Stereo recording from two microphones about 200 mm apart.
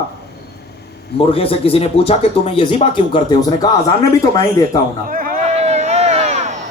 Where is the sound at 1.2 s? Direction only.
30° left (ahead or behind).